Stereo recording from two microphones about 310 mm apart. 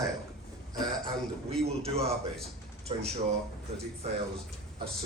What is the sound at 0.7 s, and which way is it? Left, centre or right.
A man's voice, centre.